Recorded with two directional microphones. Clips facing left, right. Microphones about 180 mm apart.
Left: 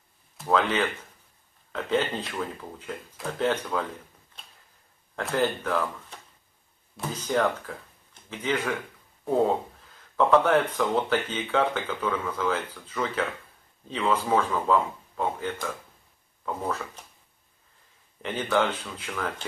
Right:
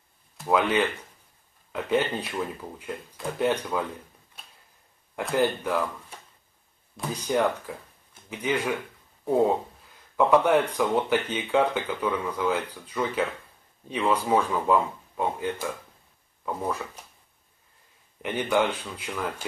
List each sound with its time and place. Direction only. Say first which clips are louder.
0.5 s speech: right 1 dB; 15° right (ahead or behind)
5.3 s speech: right 1 dB; 15° right (ahead or behind)
10.1 s speech: right 1 dB; 15° right (ahead or behind)
18.2 s speech: right 1 dB; 15° right (ahead or behind)